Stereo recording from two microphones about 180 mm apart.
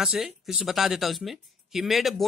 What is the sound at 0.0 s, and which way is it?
Speech, 5° right (ahead or behind).